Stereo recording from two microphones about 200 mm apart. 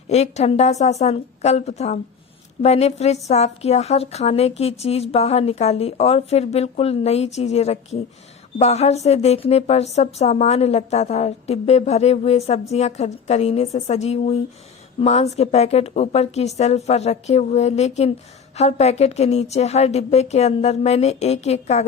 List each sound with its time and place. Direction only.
0.1 s a woman's voice: 35° left (ahead or behind)